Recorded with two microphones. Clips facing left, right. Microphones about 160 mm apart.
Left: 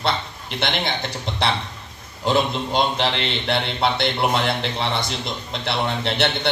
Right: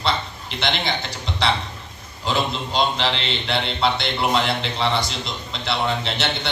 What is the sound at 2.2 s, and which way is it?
A man's voice, 55° left (ahead or behind).